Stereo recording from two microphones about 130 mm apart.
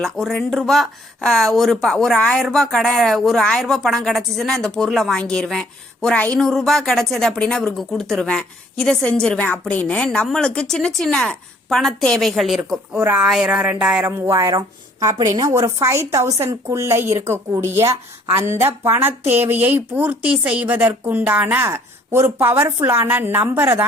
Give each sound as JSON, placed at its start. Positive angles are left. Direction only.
{"t": 0.0, "sound": "speech", "side_deg": 0}
{"t": 12.9, "sound": "a woman's voice", "side_deg": -15}
{"t": 13.2, "sound": "a woman's voice", "side_deg": -5}
{"t": 14.3, "sound": "a woman's voice", "side_deg": -25}